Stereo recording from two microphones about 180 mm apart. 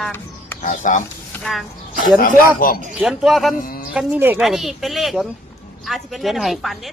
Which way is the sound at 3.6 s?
50° left (ahead or behind).